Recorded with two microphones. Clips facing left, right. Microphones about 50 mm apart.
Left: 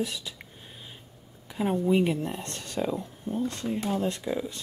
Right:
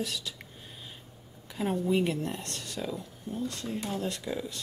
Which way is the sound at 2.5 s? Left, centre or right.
Left.